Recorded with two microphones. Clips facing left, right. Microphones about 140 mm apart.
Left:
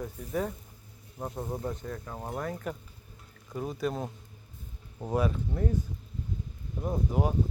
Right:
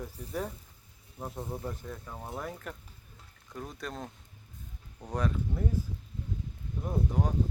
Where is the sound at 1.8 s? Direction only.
Centre (ahead or behind).